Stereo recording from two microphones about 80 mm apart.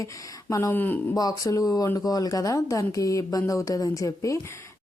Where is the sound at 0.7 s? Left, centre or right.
Left.